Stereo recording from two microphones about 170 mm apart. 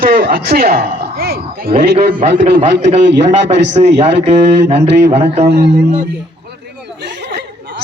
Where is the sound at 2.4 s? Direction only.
35° right (ahead or behind).